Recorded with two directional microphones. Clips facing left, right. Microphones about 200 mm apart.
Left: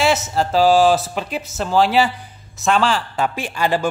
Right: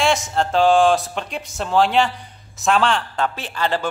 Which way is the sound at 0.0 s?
5° left (ahead or behind).